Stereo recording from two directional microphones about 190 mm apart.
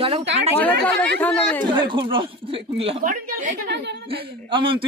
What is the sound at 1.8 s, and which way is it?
A woman's voice, 25° right (ahead or behind).